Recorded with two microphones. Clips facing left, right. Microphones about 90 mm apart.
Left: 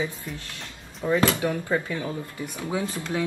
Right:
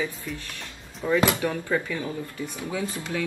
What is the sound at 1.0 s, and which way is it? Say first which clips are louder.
Speech: even; 15° left (ahead or behind).